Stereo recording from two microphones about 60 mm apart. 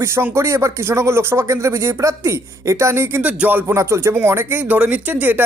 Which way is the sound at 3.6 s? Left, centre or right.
Right.